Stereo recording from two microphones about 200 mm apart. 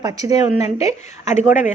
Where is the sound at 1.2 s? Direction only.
35° left (ahead or behind).